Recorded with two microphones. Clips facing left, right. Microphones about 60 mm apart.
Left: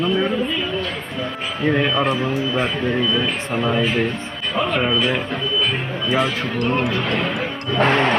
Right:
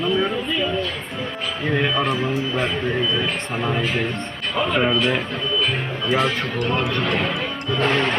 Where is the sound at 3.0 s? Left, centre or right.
Centre.